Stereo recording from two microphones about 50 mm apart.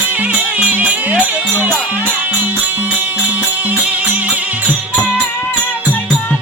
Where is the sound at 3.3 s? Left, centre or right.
Right.